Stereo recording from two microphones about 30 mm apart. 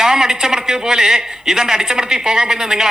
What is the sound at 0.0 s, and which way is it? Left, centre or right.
A man's voice, centre.